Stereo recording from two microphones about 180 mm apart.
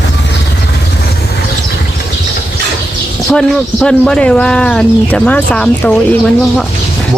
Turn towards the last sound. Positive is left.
turn(degrees=5)  # may be behind; listen again after turning